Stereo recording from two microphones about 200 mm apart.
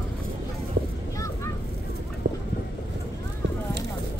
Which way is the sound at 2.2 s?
45° right (ahead or behind).